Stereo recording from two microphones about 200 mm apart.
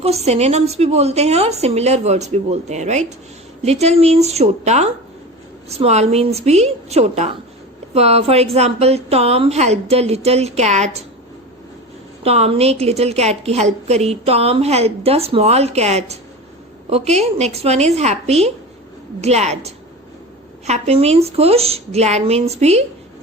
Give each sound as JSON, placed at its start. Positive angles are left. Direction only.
{"t": 0.0, "sound": "a woman's voice", "side_deg": -30}
{"t": 12.2, "sound": "a woman's voice", "side_deg": -30}